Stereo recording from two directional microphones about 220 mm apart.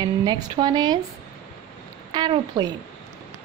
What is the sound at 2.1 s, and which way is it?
Speech, 20° right (ahead or behind).